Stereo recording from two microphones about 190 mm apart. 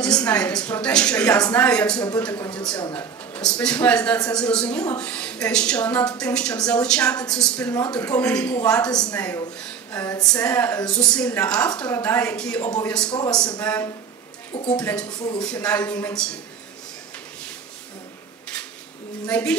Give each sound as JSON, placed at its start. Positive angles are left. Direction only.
{"t": 0.0, "sound": "a woman's voice", "side_deg": 5}
{"t": 9.9, "sound": "a woman's voice", "side_deg": 20}
{"t": 13.1, "sound": "a man's voice", "side_deg": 20}
{"t": 13.6, "sound": "a woman's voice", "side_deg": 5}
{"t": 14.5, "sound": "speech", "side_deg": 30}
{"t": 14.8, "sound": "a woman's voice", "side_deg": 5}
{"t": 19.2, "sound": "a woman's voice", "side_deg": 5}